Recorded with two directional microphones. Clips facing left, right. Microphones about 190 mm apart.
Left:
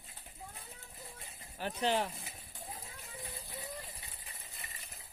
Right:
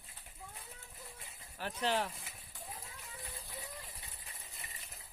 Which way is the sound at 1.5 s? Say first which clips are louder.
Left 2 dB; 20° left (ahead or behind).